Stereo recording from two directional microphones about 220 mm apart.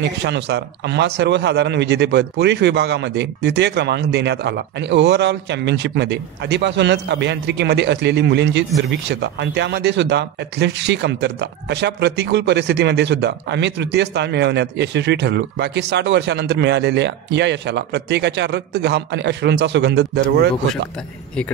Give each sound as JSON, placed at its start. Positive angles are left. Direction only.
{"t": 0.2, "sound": "speech", "side_deg": -50}